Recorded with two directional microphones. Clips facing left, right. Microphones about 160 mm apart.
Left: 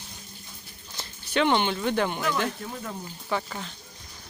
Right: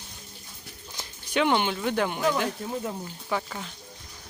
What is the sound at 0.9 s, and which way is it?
Speech, 10° right (ahead or behind).